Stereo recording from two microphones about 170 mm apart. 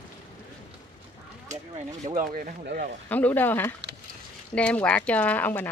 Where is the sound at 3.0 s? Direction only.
10° left (ahead or behind).